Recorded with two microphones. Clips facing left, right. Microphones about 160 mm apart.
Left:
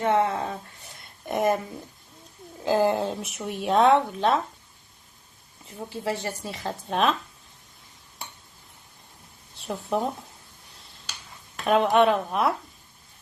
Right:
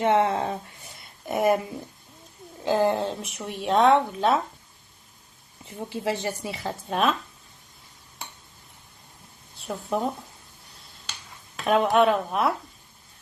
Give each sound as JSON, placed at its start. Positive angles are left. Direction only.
{"t": 0.0, "sound": "speech", "side_deg": -20}
{"t": 1.0, "sound": "a sound", "side_deg": -5}
{"t": 2.5, "sound": "speech", "side_deg": 0}
{"t": 5.6, "sound": "speech", "side_deg": -20}
{"t": 9.6, "sound": "speech", "side_deg": 0}
{"t": 11.5, "sound": "speech", "side_deg": 0}